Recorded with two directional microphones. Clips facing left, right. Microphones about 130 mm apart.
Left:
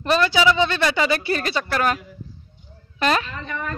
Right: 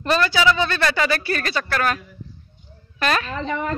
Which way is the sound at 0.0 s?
15° left (ahead or behind).